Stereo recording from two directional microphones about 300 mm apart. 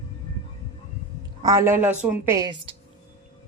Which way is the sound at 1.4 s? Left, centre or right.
Centre.